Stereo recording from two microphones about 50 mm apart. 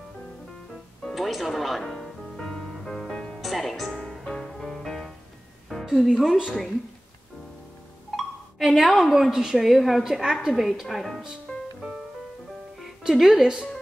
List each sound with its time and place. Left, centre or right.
1.1 s music: centre
3.3 s speech: centre
4.2 s music: centre
6.0 s a woman's voice: centre
8.2 s a woman's voice: centre
11.5 s music: centre
12.7 s music: centre